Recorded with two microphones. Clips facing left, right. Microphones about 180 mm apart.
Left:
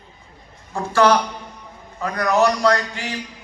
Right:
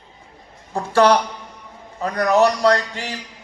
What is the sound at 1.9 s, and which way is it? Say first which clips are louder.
A man's voice: right 2 dB; 35° right (ahead or behind).